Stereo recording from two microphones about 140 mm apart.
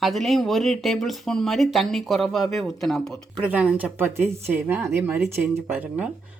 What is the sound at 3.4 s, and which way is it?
Speech, 10° right (ahead or behind).